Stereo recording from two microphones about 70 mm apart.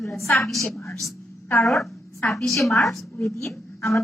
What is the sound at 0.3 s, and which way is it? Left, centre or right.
Speech, left.